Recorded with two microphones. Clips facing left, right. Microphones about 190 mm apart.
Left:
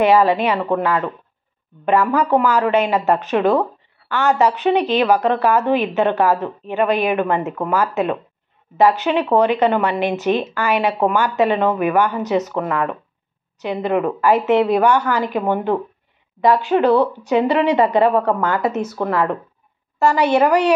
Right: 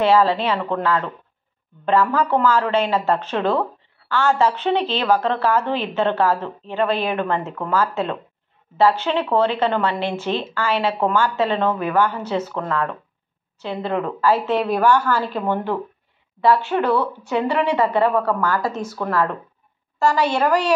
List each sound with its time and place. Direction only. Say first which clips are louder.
0.0 s a woman's voice: left 2 dB; 15° left (ahead or behind)